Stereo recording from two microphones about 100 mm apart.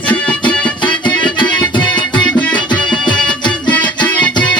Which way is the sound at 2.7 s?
50° left (ahead or behind).